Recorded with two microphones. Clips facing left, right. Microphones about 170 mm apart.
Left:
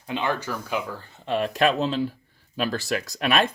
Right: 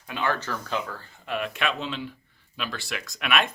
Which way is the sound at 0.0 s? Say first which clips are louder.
Left 2 dB; 20° left (ahead or behind).